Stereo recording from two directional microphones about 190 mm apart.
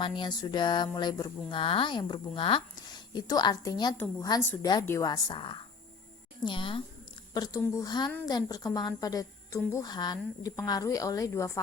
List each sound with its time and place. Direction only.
0.0 s a woman's voice: 25° left (ahead or behind)